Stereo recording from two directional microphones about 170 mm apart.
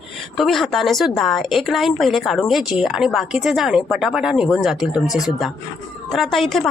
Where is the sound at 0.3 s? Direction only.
Centre (ahead or behind).